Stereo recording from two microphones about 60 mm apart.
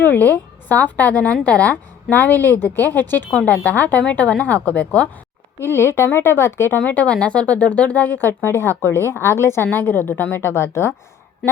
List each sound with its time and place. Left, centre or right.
0.0 s a woman's voice: left
5.5 s speech: left
6.7 s speech: left
9.8 s speech: left